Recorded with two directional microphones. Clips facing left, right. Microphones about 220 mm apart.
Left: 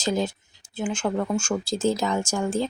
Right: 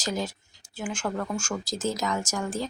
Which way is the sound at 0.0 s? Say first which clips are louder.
Left 5 dB; 25° left (ahead or behind).